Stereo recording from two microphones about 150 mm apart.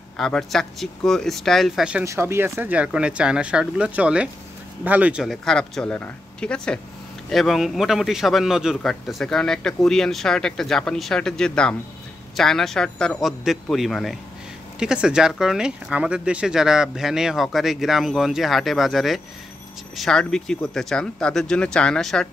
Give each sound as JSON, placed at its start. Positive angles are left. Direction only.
{"t": 0.2, "sound": "a man's voice", "side_deg": 0}
{"t": 2.0, "sound": "a man's voice", "side_deg": -15}